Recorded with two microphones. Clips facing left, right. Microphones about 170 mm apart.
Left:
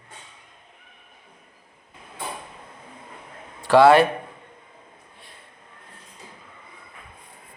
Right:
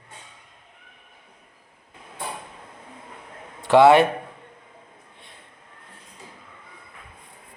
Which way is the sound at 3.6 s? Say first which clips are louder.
Even; 20° right (ahead or behind).